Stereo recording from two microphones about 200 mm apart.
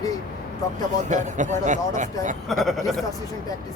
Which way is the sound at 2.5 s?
Centre (ahead or behind).